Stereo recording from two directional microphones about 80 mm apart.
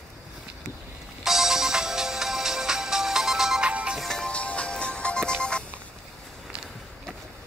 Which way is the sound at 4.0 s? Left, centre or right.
Centre.